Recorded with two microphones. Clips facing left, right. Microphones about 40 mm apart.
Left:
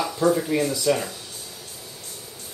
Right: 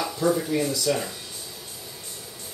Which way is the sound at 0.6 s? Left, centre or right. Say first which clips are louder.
Left 3 dB; left.